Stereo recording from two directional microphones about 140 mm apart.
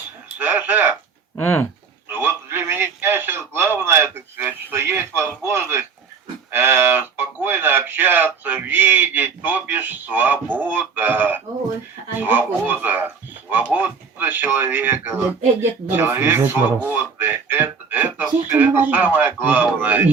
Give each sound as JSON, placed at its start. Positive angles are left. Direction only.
{"t": 0.3, "sound": "speech", "side_deg": -10}
{"t": 1.4, "sound": "speech", "side_deg": 15}
{"t": 2.0, "sound": "a sound", "side_deg": -15}
{"t": 5.4, "sound": "a man's voice", "side_deg": -15}
{"t": 16.9, "sound": "music", "side_deg": -15}
{"t": 18.5, "sound": "a man's voice", "side_deg": -15}